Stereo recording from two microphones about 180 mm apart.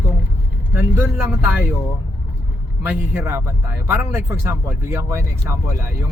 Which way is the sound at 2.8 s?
10° right (ahead or behind).